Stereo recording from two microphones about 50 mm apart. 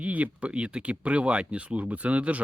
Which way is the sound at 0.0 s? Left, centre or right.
Right.